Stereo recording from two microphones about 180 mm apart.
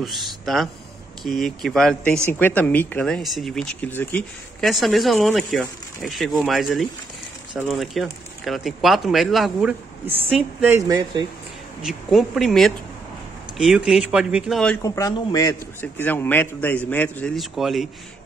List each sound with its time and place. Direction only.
0.0 s speech: centre (ahead or behind); by 11.2 s 20° right (ahead or behind)
11.8 s speech: centre (ahead or behind)
14.8 s a man's voice: 20° left (ahead or behind); by 17.8 s centre (ahead or behind)